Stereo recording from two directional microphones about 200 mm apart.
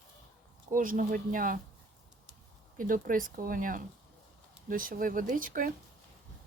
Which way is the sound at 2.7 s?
45° right (ahead or behind).